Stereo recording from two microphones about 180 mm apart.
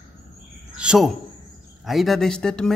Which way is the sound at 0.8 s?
5° right (ahead or behind).